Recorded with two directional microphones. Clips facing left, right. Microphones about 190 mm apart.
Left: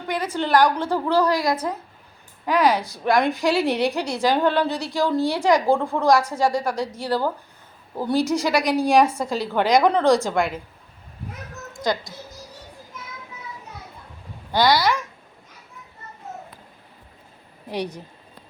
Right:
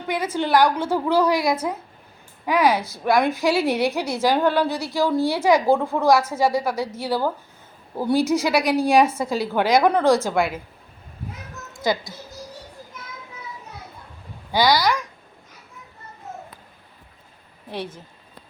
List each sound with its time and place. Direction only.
0.3 s a woman's voice: 10° right (ahead or behind)
0.7 s speech: 15° left (ahead or behind)
0.9 s a woman's voice: 10° right (ahead or behind)
11.8 s a woman's voice: 5° right (ahead or behind)
14.5 s a woman's voice: centre (ahead or behind)
17.7 s speech: 15° left (ahead or behind)